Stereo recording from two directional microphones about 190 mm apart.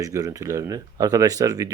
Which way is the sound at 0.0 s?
15° right (ahead or behind).